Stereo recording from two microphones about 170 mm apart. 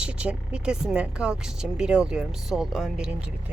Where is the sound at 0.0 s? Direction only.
5° right (ahead or behind).